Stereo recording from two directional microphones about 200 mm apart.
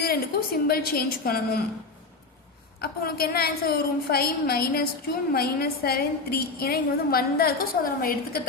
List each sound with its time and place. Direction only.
0.0 s a woman's voice: 50° left (ahead or behind)
2.8 s a woman's voice: 50° left (ahead or behind)